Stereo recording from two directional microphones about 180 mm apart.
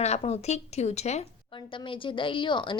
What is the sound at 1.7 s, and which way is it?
A woman's voice, 30° left (ahead or behind).